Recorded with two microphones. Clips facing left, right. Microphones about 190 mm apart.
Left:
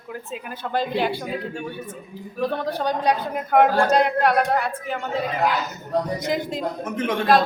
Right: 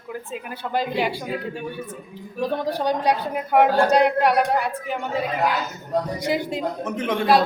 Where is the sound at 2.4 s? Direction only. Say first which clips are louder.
Right 1 dB; 15° right (ahead or behind).